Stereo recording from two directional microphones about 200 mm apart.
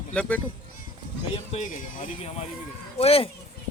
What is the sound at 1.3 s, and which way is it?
A child's voice, 35° left (ahead or behind).